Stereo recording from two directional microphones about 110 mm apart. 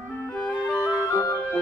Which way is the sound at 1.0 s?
30° left (ahead or behind).